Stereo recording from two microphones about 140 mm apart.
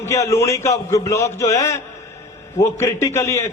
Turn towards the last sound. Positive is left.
turn(degrees=20)  # may be behind; listen again after turning